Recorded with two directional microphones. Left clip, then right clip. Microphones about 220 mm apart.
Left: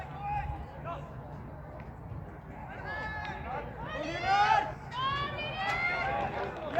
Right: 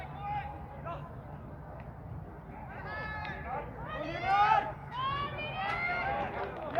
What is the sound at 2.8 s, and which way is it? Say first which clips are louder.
Run: left 2 dB; 25° right (ahead or behind).